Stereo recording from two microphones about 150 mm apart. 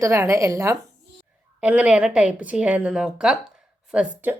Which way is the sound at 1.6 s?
10° right (ahead or behind).